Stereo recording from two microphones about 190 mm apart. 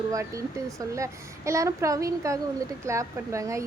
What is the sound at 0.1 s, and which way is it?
Speech, 15° right (ahead or behind).